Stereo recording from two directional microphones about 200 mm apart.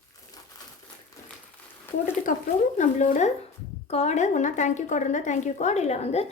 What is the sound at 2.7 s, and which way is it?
A woman's voice, 40° left (ahead or behind).